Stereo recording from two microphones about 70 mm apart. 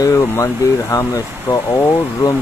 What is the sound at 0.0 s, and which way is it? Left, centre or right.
Speech, left.